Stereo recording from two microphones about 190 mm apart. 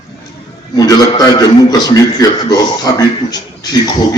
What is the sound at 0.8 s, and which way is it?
A man's voice, 20° left (ahead or behind).